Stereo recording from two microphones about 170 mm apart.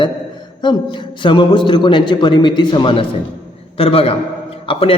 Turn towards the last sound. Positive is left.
turn(degrees=35)  # may be behind; listen again after turning